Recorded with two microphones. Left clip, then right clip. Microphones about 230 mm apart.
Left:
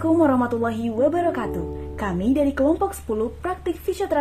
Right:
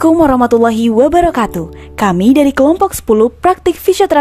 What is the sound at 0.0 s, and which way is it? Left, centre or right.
A woman's voice, right.